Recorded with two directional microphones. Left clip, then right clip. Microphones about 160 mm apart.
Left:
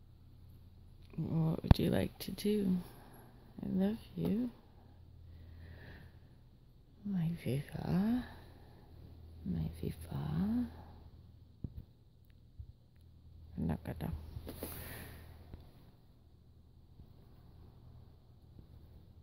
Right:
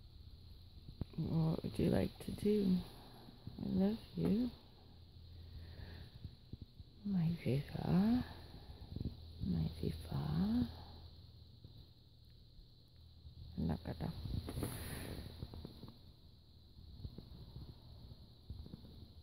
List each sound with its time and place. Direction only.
1.1 s speech: centre (ahead or behind)
7.1 s speech: centre (ahead or behind)
9.5 s speech: centre (ahead or behind)
13.6 s roaring cats: 5° left (ahead or behind)